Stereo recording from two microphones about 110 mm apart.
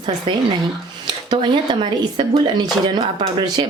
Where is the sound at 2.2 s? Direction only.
45° right (ahead or behind).